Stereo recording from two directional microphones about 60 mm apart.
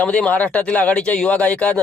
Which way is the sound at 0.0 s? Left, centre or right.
Left.